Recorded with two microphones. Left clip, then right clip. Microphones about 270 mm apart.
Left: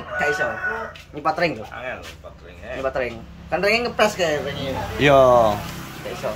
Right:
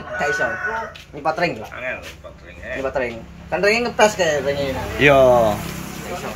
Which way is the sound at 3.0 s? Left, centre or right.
Centre.